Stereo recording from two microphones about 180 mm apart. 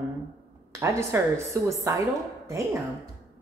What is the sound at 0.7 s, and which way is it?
A woman's voice, 15° right (ahead or behind).